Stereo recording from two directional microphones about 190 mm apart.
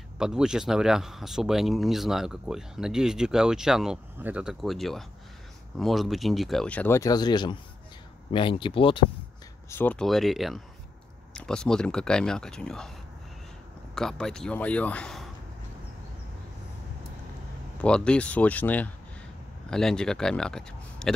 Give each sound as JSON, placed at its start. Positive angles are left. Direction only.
{"t": 0.2, "sound": "speech", "side_deg": -5}
{"t": 9.7, "sound": "speech", "side_deg": 10}
{"t": 13.9, "sound": "speech", "side_deg": 5}
{"t": 17.8, "sound": "speech", "side_deg": 5}